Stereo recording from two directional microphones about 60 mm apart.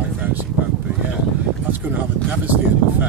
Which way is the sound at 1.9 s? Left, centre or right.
Right.